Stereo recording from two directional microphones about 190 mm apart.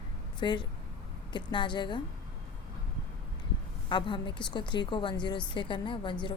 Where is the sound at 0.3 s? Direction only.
25° left (ahead or behind).